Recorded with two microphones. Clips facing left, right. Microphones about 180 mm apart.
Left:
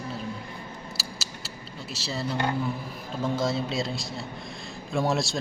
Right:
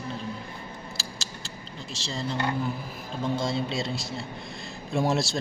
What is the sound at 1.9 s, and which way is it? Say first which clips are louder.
Speech: left 1 dB; 5° left (ahead or behind).